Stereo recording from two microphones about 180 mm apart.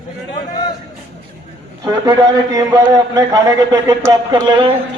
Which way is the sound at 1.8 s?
20° right (ahead or behind).